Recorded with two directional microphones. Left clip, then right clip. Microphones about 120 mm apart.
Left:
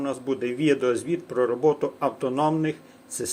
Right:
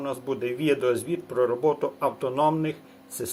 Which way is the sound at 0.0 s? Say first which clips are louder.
Left 2 dB; 35° left (ahead or behind).